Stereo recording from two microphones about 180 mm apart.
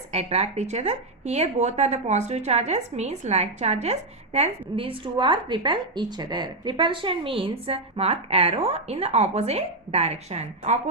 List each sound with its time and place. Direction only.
0.1 s a woman's voice: 35° right (ahead or behind)